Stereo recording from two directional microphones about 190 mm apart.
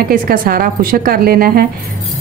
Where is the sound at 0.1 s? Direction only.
45° right (ahead or behind).